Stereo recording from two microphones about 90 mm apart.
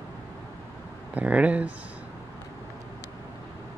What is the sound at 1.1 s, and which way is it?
Speech, 15° right (ahead or behind).